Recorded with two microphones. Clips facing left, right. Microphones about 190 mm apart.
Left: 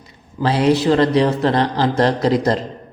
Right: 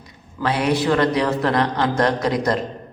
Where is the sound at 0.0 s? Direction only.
25° left (ahead or behind).